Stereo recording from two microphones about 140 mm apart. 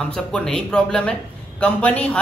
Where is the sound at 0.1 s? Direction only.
5° left (ahead or behind).